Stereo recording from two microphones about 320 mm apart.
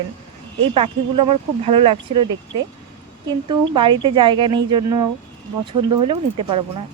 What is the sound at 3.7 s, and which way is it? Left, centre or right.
Speech, centre.